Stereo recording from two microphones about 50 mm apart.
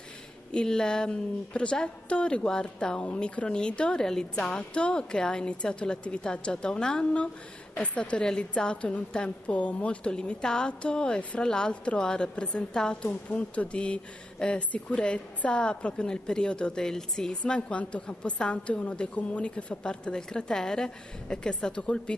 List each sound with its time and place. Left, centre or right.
0.5 s a woman's voice: centre